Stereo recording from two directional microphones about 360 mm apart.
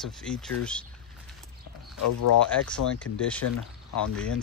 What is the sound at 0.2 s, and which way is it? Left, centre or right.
Speech, centre.